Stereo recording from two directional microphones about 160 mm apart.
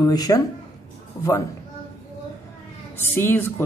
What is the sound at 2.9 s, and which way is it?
Speech, 15° left (ahead or behind).